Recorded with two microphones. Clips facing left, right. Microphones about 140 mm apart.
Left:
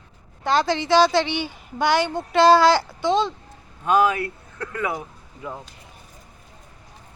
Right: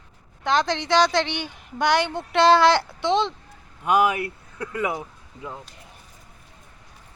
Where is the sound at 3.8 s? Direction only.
15° right (ahead or behind).